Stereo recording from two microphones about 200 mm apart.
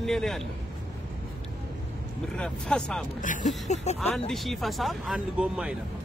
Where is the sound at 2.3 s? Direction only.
5° left (ahead or behind).